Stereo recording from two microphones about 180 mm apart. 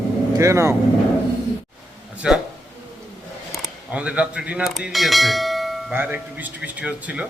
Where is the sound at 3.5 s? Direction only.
5° right (ahead or behind).